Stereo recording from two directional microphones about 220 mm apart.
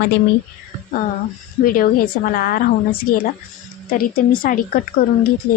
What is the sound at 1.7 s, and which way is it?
A woman's voice, 40° left (ahead or behind).